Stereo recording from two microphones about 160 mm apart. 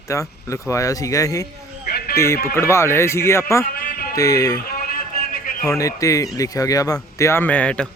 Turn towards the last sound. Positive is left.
turn(degrees=5)  # may be behind; listen again after turning